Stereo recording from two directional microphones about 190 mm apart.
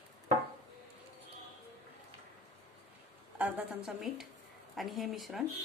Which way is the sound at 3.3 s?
10° right (ahead or behind).